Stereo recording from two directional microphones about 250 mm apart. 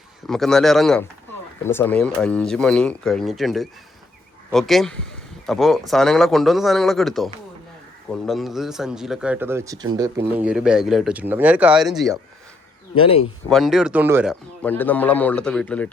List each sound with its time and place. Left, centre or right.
0.3 s speech: centre
8.3 s speech: centre
13.0 s speech: left
13.5 s speech: centre
14.6 s speech: centre